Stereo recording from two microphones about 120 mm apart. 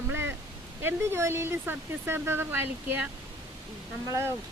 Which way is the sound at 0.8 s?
20° right (ahead or behind).